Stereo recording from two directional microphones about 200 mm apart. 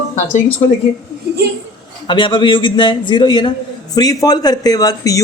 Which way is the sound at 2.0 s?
25° left (ahead or behind).